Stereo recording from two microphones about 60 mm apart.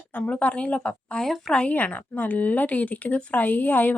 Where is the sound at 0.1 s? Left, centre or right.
Left.